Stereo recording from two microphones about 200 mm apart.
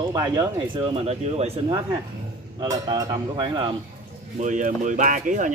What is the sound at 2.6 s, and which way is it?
Speech, 20° right (ahead or behind).